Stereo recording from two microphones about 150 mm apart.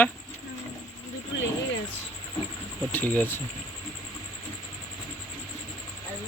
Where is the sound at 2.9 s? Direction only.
10° left (ahead or behind).